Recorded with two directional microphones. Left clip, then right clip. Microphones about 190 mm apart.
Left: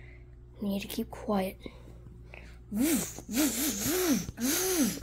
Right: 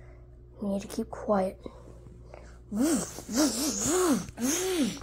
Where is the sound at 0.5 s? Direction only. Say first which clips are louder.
Right 2 dB; 15° left (ahead or behind).